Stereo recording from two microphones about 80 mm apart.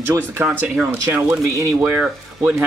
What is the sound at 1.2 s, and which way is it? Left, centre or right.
Speech, right.